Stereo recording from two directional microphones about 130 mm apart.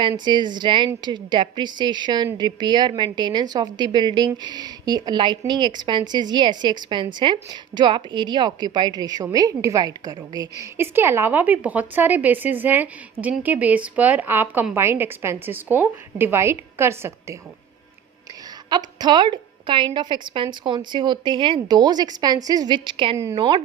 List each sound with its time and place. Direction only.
0.3 s a woman's voice: 35° right (ahead or behind); by 17.3 s 20° right (ahead or behind)
18.7 s a woman's voice: 35° right (ahead or behind)